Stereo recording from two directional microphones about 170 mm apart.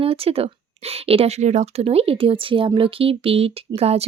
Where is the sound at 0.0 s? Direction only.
35° right (ahead or behind).